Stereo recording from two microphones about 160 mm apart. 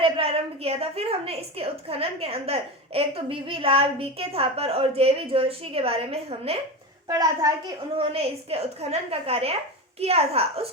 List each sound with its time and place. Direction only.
0.0 s a woman's voice: 35° right (ahead or behind)
7.1 s a child's voice: 20° right (ahead or behind)
7.9 s a woman's voice: 40° right (ahead or behind)